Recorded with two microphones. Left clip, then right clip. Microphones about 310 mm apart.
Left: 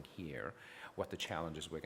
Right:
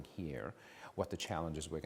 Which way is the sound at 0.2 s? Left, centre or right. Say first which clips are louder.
Even; right.